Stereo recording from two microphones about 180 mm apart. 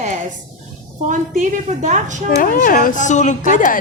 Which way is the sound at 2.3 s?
50° left (ahead or behind).